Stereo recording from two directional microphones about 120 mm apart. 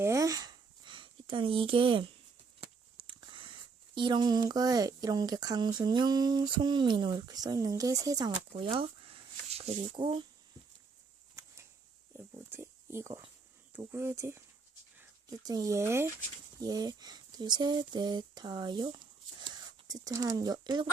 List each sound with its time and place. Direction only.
0.0 s a sound: 25° right (ahead or behind); by 2.0 s 45° right (ahead or behind)
2.6 s speech: 45° right (ahead or behind); by 8.3 s 30° right (ahead or behind)
8.5 s speech: 50° right (ahead or behind)
12.1 s a sound: 15° right (ahead or behind)
13.7 s speech: 20° right (ahead or behind)
16.6 s speech: 30° right (ahead or behind)